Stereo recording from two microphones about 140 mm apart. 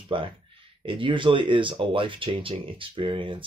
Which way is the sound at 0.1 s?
35° right (ahead or behind).